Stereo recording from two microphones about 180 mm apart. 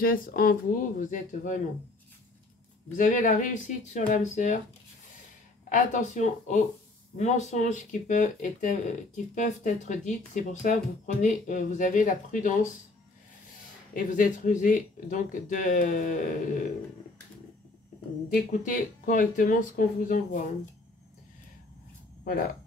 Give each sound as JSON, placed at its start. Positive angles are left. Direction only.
{"t": 0.0, "sound": "speech", "side_deg": 55}
{"t": 3.0, "sound": "speech", "side_deg": 45}
{"t": 5.7, "sound": "speech", "side_deg": 45}
{"t": 13.9, "sound": "speech", "side_deg": 45}
{"t": 18.3, "sound": "speech", "side_deg": 50}
{"t": 22.2, "sound": "speech", "side_deg": 50}